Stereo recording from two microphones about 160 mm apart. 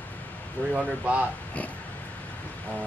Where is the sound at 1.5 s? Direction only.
10° left (ahead or behind).